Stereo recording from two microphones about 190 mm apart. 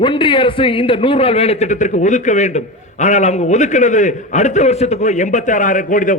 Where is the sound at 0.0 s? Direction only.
25° left (ahead or behind).